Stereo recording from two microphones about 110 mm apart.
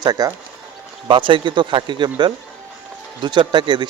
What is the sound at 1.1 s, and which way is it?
A man's voice, 50° right (ahead or behind).